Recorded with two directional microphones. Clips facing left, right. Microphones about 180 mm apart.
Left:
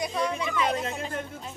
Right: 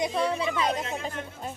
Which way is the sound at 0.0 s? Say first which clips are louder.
Right 2 dB; 30° right (ahead or behind).